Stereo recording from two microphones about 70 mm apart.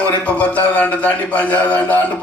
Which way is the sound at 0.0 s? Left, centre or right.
Left.